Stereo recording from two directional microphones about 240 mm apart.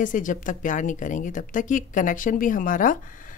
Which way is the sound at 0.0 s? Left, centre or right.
Left.